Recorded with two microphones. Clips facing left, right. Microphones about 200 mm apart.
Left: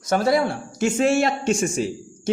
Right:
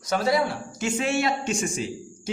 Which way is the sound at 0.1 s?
50° left (ahead or behind).